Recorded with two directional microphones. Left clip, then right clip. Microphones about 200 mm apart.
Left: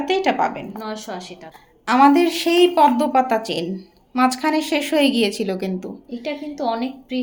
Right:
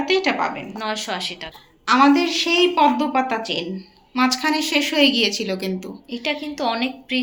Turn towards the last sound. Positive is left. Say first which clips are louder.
# right 1 dB
turn(degrees=0)  # may be behind; listen again after turning